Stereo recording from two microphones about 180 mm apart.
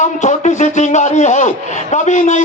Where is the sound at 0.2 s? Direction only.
40° left (ahead or behind).